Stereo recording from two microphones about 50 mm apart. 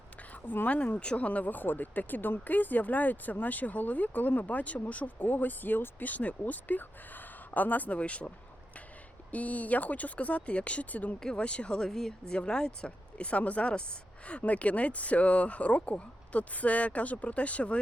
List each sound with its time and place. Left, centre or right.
0.4 s speech: left
0.8 s speech: left
9.3 s speech: left
11.2 s speech: centre
11.8 s speech: centre; by 17.7 s left